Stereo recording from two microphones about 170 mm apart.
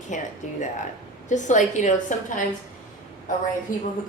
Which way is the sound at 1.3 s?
45° left (ahead or behind).